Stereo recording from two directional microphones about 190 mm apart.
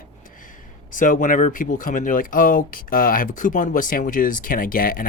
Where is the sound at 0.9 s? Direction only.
45° left (ahead or behind).